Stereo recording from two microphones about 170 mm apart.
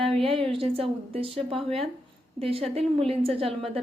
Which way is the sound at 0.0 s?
35° right (ahead or behind).